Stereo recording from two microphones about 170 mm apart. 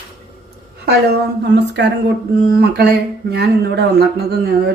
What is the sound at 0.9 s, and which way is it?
Speech, 75° right (ahead or behind).